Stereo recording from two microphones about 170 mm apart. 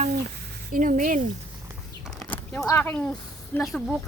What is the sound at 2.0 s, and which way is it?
Speech, 10° left (ahead or behind).